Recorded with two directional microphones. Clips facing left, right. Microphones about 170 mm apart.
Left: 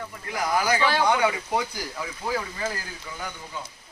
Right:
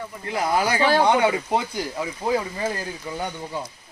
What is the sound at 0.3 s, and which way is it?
Speech, 25° right (ahead or behind).